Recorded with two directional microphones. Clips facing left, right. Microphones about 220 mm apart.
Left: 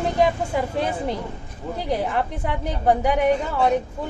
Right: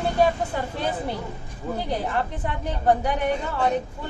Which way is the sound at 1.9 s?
10° left (ahead or behind).